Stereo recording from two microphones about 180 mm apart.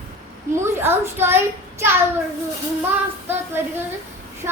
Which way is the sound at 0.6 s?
15° right (ahead or behind).